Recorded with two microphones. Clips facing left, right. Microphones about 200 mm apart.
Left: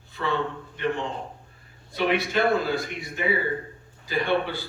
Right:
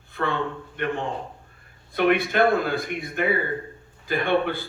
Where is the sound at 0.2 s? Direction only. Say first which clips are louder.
Right 1 dB; 55° right (ahead or behind).